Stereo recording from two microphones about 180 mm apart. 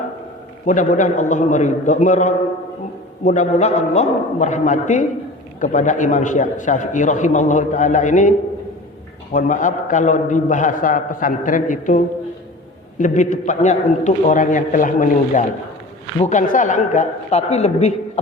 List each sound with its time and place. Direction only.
0.6 s a man's voice: 45° left (ahead or behind)